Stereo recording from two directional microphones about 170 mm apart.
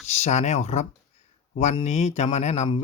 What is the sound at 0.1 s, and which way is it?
Speech, 40° left (ahead or behind).